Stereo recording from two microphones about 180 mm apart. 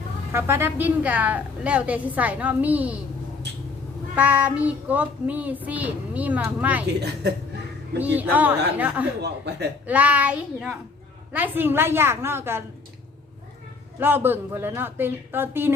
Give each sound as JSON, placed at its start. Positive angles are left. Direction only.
{"t": 0.3, "sound": "child singing", "side_deg": -15}
{"t": 4.1, "sound": "child singing", "side_deg": -10}
{"t": 7.0, "sound": "speech", "side_deg": -70}
{"t": 7.9, "sound": "child singing", "side_deg": -10}
{"t": 9.2, "sound": "speech", "side_deg": -70}
{"t": 9.8, "sound": "child singing", "side_deg": -10}
{"t": 14.0, "sound": "child singing", "side_deg": -10}